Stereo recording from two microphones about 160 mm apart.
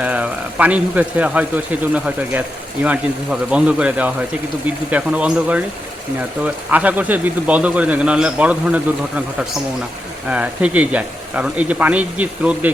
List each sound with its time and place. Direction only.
0.0 s speech: 10° right (ahead or behind)